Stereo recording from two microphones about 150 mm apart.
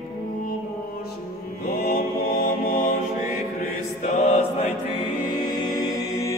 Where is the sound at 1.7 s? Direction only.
85° left; by 2.9 s 65° left (ahead or behind).